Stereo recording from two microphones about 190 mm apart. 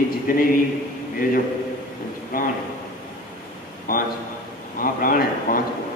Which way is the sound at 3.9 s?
50° left (ahead or behind).